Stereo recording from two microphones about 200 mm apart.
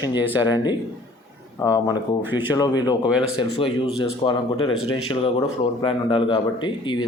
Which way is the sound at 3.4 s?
25° left (ahead or behind).